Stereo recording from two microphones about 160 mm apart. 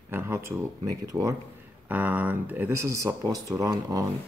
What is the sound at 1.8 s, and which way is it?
Speech, 10° right (ahead or behind).